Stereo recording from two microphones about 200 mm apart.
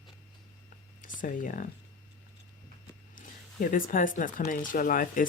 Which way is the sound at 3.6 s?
45° left (ahead or behind).